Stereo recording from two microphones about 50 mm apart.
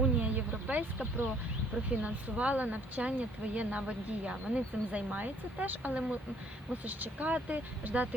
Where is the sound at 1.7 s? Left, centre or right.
Centre; by 5.9 s right.